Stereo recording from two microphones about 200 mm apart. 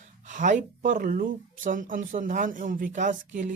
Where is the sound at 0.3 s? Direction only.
40° right (ahead or behind).